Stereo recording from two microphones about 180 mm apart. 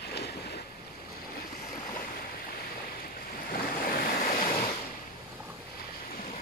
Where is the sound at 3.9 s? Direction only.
55° left (ahead or behind).